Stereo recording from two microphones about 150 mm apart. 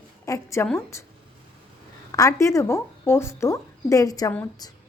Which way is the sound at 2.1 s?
20° left (ahead or behind).